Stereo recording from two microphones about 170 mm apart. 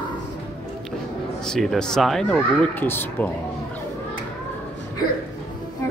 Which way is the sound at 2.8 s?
10° left (ahead or behind).